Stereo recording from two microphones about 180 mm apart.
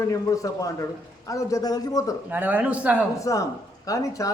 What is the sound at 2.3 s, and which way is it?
Speech, 10° right (ahead or behind).